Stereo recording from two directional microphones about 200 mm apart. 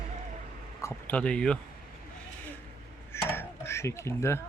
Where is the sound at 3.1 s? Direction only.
10° left (ahead or behind).